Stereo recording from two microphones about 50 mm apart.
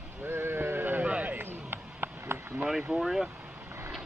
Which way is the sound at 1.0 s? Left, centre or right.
Right.